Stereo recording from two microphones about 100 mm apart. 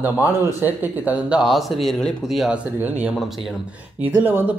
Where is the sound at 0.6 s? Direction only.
15° right (ahead or behind); by 2.4 s 5° left (ahead or behind).